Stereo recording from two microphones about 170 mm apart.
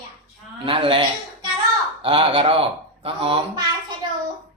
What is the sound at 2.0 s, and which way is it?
Speech, 30° right (ahead or behind).